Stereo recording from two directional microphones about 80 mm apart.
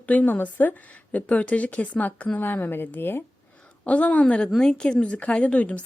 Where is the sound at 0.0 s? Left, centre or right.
Left.